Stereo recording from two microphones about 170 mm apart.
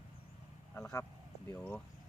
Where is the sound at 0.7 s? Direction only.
10° left (ahead or behind).